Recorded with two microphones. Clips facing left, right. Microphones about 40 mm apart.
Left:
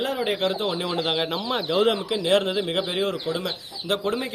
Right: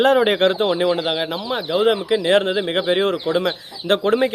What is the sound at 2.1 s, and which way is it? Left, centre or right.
Speech, right.